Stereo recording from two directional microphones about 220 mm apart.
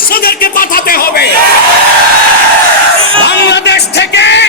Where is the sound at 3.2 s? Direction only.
50° left (ahead or behind).